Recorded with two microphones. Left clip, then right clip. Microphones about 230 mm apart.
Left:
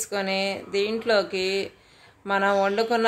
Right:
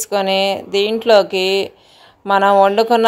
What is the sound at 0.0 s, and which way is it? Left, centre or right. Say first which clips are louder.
Speech: right 10 dB; right.